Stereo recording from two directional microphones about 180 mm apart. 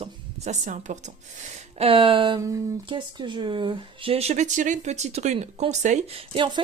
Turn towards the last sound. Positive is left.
turn(degrees=-30)  # may be behind; listen again after turning